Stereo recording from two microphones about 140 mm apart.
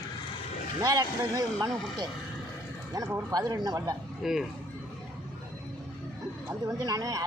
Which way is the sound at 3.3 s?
25° right (ahead or behind).